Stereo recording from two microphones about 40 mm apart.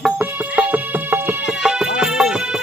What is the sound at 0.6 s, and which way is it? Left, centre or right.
Music, right.